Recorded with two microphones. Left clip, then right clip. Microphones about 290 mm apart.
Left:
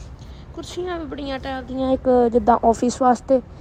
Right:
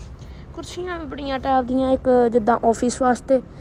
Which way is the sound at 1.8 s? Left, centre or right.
Left.